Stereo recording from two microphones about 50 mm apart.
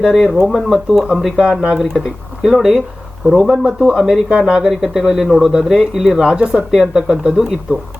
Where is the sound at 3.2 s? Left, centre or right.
Centre; by 7.8 s right.